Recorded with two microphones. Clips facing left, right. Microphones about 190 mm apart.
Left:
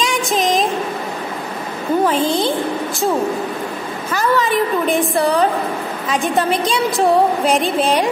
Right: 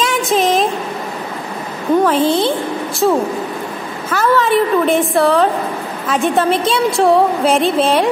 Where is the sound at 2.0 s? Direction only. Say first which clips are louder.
Right 1 dB; centre (ahead or behind).